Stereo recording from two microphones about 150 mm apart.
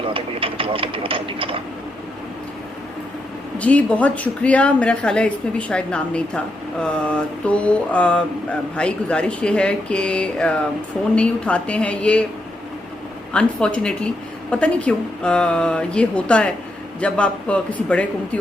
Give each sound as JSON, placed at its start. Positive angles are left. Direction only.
{"t": 0.1, "sound": "speech", "side_deg": -35}
{"t": 3.6, "sound": "a woman's voice", "side_deg": 10}
{"t": 13.3, "sound": "a woman's voice", "side_deg": 5}